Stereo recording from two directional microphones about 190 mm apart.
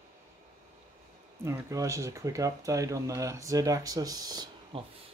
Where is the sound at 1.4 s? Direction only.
15° right (ahead or behind).